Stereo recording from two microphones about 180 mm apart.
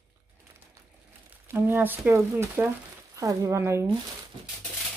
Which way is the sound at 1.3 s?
10° right (ahead or behind).